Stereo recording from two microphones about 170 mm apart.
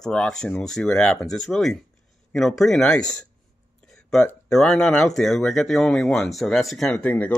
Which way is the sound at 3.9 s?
5° left (ahead or behind).